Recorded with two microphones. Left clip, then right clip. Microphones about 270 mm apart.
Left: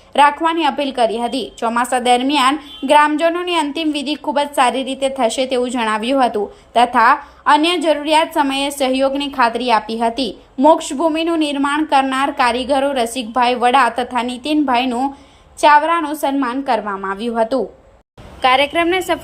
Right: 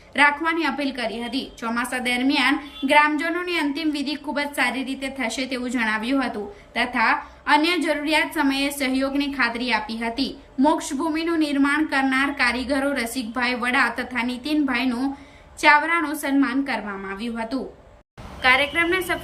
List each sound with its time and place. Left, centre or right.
0.1 s a woman's voice: centre
17.2 s speech: left
18.4 s a woman's voice: centre